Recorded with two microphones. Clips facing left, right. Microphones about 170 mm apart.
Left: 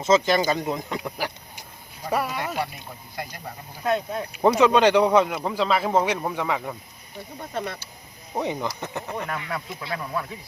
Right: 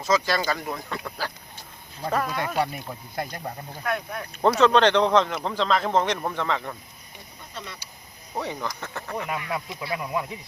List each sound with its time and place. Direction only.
0.0 s speech: 20° left (ahead or behind)
3.8 s speech: 25° left (ahead or behind)
4.3 s speech: 10° left (ahead or behind)
7.3 s speech: 55° left (ahead or behind)
8.4 s speech: 15° left (ahead or behind)
9.9 s speech: 15° right (ahead or behind)